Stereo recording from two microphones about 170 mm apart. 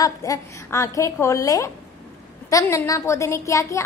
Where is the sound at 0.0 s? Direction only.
20° left (ahead or behind).